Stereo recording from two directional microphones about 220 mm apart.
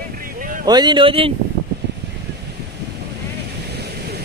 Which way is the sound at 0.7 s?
20° right (ahead or behind).